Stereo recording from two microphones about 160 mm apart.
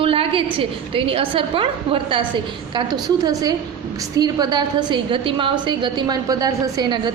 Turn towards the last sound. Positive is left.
turn(degrees=-25)  # may be behind; listen again after turning